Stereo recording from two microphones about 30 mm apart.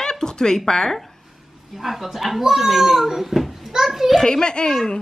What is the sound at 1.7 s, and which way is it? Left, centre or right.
A woman's voice, centre.